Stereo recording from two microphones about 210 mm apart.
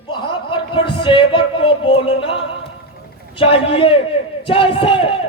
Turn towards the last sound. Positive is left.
turn(degrees=25)  # may be behind; listen again after turning